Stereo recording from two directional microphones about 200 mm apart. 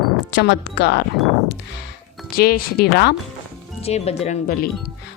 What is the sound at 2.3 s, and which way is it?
Speech, 50° left (ahead or behind).